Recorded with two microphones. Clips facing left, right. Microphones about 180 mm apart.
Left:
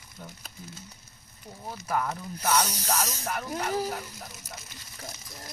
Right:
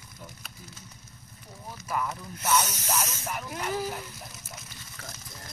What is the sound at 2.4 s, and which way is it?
Music, 35° left (ahead or behind).